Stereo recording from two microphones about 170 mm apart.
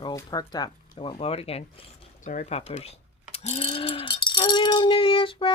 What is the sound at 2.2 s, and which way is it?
Speech, 50° left (ahead or behind).